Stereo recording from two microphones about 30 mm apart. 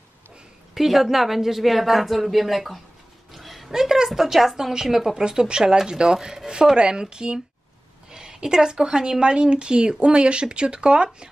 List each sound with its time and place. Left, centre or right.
0.7 s speech: centre
3.3 s a sound: centre
3.7 s speech: centre
5.3 s a woman's voice: right